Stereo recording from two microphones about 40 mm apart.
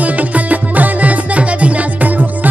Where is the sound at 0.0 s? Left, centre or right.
Right.